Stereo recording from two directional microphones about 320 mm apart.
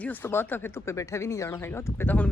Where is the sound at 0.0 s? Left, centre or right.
Centre.